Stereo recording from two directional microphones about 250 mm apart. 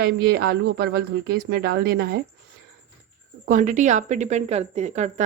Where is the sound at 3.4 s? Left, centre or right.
Right.